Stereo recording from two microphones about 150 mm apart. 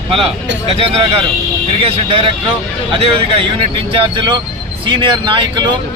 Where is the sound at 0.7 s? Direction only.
40° right (ahead or behind).